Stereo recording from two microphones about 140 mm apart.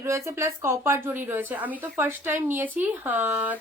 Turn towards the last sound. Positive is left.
turn(degrees=-10)  # may be behind; listen again after turning